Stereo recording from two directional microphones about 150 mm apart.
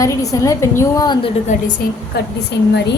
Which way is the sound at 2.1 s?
90° left.